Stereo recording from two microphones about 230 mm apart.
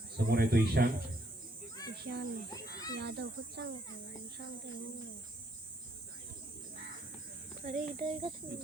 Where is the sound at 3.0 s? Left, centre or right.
Right.